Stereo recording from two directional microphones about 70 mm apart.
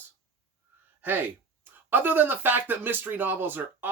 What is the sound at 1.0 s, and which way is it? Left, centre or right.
Speech, right.